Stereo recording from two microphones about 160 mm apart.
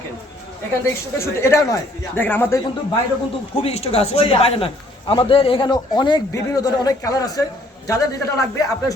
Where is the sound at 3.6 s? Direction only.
40° left (ahead or behind); by 7.4 s 20° left (ahead or behind).